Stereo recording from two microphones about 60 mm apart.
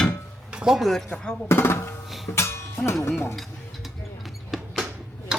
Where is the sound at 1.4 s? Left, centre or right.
Left.